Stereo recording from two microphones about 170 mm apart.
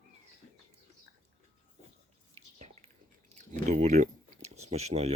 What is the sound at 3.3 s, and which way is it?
Speech, 45° right (ahead or behind).